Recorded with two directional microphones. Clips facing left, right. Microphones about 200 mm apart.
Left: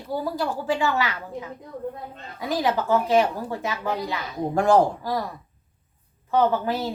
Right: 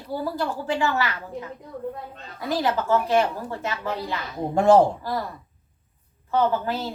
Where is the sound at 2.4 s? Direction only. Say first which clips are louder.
Even; 15° left (ahead or behind).